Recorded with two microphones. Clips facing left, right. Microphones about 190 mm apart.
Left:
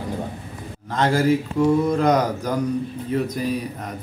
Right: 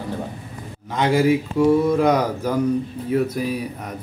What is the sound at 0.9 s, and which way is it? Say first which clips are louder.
Speech: right 1 dB; 5° right (ahead or behind).